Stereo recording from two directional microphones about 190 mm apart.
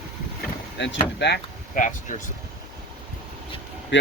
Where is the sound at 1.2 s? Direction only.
65° left (ahead or behind).